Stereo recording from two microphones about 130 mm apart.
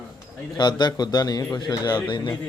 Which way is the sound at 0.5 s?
35° left (ahead or behind).